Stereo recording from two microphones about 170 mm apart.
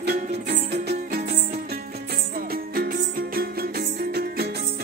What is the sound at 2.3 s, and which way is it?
Music, 60° right (ahead or behind).